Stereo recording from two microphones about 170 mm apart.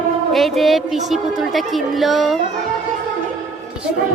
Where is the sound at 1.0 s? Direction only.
Centre (ahead or behind).